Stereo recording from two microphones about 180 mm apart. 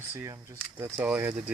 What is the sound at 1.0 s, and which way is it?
Speech, 10° right (ahead or behind).